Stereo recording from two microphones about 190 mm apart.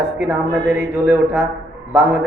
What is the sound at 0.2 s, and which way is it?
Speech, 10° right (ahead or behind).